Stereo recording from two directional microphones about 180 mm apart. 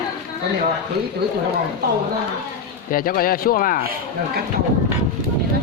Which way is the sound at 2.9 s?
55° left (ahead or behind).